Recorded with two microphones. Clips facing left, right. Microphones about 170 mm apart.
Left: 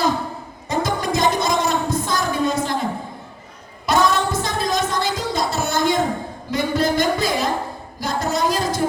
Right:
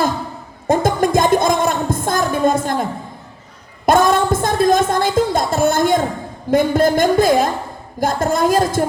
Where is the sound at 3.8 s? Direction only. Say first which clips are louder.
Right 5 dB; 50° right (ahead or behind).